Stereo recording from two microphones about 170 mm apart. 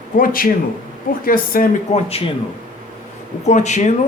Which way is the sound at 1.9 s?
35° left (ahead or behind).